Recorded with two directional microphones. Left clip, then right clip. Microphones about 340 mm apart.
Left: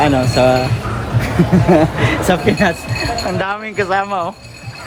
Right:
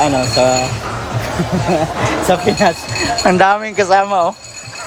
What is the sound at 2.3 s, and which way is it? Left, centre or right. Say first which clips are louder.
Speech: right 3 dB; centre.